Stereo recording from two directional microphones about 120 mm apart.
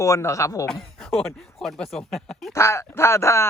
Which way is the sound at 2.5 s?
25° left (ahead or behind).